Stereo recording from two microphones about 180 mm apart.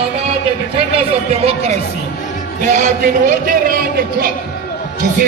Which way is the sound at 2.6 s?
45° right (ahead or behind).